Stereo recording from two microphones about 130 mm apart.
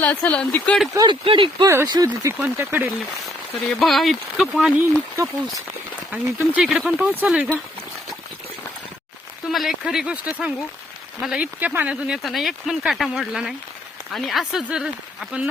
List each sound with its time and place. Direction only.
0.0 s speech: 15° left (ahead or behind)
1.2 s speech: 40° right (ahead or behind)
1.6 s speech: 25° right (ahead or behind)
2.4 s speech: 15° right (ahead or behind)
3.6 s speech: centre (ahead or behind)
4.9 s speech: 20° right (ahead or behind); by 7.5 s centre (ahead or behind)
9.5 s speech: centre (ahead or behind)